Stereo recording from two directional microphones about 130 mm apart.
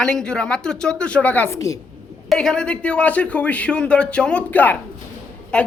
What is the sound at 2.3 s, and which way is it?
Speech, 5° left (ahead or behind).